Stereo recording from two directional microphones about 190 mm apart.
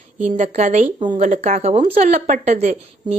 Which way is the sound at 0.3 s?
40° right (ahead or behind).